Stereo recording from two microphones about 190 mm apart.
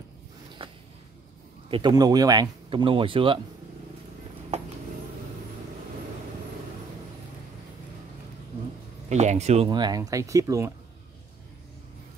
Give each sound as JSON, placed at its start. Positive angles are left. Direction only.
{"t": 0.6, "sound": "a sound", "side_deg": -30}
{"t": 1.7, "sound": "speech", "side_deg": -25}
{"t": 9.1, "sound": "speech", "side_deg": -35}
{"t": 9.7, "sound": "speech", "side_deg": -20}